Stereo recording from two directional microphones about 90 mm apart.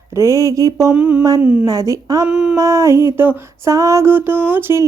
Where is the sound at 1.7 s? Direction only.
40° right (ahead or behind).